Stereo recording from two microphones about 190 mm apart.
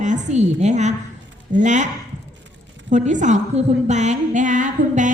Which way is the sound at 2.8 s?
40° right (ahead or behind).